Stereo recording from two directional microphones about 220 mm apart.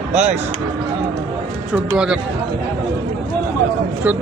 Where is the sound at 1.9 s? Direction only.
5° right (ahead or behind).